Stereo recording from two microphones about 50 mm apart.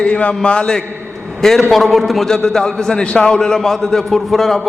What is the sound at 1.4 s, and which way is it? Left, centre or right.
A man's voice, centre.